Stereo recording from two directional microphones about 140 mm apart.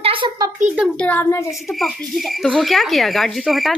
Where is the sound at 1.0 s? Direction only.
10° left (ahead or behind).